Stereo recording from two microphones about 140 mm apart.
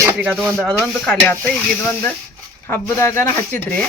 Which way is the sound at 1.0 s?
10° left (ahead or behind).